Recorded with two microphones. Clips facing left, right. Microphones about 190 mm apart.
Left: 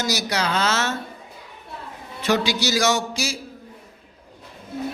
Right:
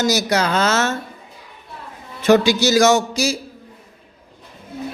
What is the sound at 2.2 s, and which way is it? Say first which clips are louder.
Speech: right 8 dB; 45° right (ahead or behind).